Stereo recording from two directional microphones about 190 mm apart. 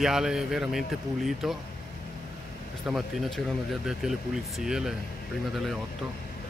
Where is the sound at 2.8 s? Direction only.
Centre (ahead or behind).